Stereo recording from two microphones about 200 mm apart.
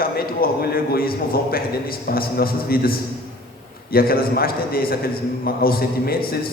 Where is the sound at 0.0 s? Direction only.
50° left (ahead or behind).